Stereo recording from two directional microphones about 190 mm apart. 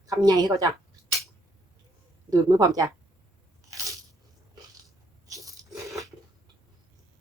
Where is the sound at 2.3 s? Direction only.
20° right (ahead or behind).